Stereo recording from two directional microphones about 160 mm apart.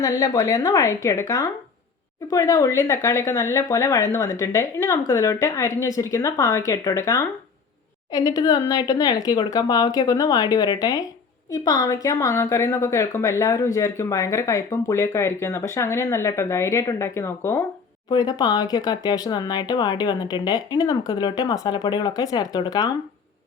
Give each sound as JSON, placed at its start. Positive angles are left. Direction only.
{"t": 0.0, "sound": "a woman's voice", "side_deg": 20}